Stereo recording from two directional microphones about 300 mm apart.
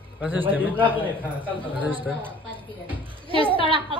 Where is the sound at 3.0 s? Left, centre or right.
Centre.